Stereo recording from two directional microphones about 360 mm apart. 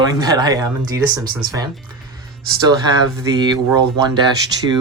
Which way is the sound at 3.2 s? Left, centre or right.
Centre.